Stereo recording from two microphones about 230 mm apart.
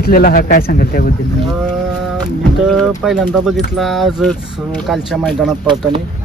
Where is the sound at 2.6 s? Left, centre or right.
Centre.